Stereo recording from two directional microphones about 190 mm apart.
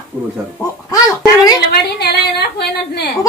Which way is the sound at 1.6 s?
60° left (ahead or behind).